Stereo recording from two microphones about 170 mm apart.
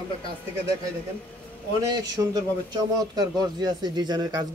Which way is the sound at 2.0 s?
20° right (ahead or behind).